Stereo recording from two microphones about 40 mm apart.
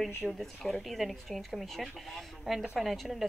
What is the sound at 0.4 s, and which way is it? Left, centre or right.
Speech, centre.